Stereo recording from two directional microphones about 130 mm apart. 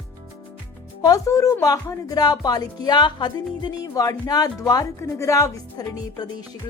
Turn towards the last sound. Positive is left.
turn(degrees=30)  # may be behind; listen again after turning